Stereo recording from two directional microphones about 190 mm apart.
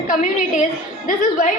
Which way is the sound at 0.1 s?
45° left (ahead or behind).